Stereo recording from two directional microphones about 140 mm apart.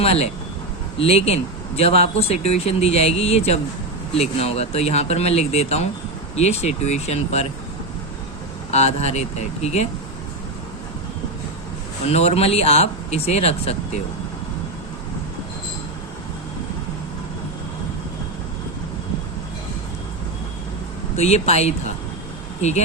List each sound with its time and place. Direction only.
0.0 s speech: 45° left (ahead or behind)
8.7 s speech: 50° left (ahead or behind)
12.0 s speech: 45° left (ahead or behind)
21.2 s speech: 50° left (ahead or behind)